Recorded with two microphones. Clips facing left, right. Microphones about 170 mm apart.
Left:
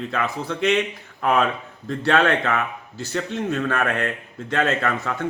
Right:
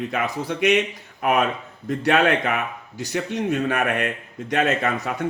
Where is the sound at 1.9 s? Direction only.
20° right (ahead or behind).